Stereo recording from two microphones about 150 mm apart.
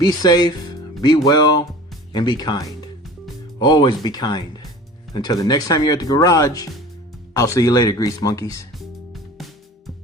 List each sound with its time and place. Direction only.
0.0 s speech: 25° left (ahead or behind)
8.8 s music: centre (ahead or behind)